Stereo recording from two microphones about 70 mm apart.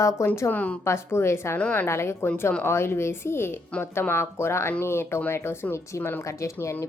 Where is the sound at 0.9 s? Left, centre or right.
Left.